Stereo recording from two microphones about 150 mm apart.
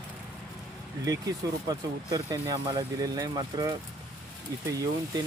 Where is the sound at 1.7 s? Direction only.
25° right (ahead or behind).